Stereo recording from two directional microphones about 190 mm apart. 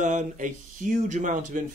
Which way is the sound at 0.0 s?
40° right (ahead or behind).